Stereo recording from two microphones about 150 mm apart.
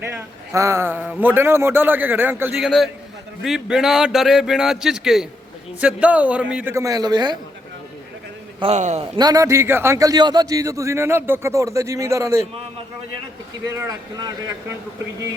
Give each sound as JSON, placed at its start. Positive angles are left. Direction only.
{"t": 0.0, "sound": "a man's voice", "side_deg": -20}
{"t": 2.6, "sound": "a man's voice", "side_deg": 0}
{"t": 8.6, "sound": "a man's voice", "side_deg": -50}
{"t": 9.1, "sound": "a man's voice", "side_deg": -25}
{"t": 13.7, "sound": "a man's voice", "side_deg": -20}